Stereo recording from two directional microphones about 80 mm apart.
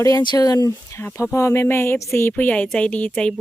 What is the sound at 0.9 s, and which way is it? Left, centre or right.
Speech, left.